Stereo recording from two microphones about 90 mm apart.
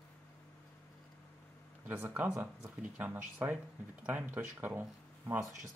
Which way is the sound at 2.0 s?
20° right (ahead or behind).